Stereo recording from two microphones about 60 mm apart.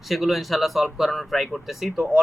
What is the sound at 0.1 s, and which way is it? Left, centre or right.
Speech, centre.